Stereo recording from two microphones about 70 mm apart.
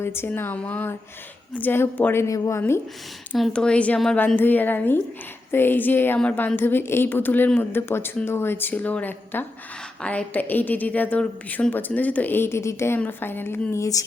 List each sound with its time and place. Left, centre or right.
0.0 s a woman's voice: left
2.1 s speech: left
2.6 s speech: left
3.5 s speech: centre
4.4 s a woman's voice: left
13.0 s speech: left